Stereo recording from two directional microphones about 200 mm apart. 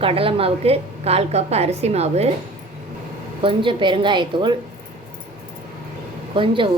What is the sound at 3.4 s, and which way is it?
A woman's voice, 25° right (ahead or behind).